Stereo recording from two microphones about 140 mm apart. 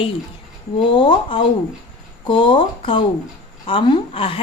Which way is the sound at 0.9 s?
40° left (ahead or behind).